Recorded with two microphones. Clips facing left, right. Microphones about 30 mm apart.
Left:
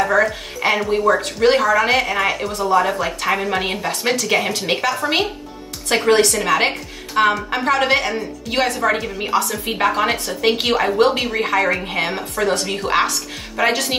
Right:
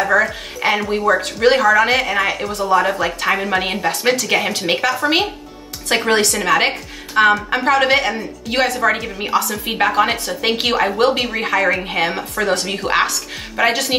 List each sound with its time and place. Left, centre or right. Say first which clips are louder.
0.0 s a woman's voice: right 1 dB; centre
6.0 s speech: left 2 dB; centre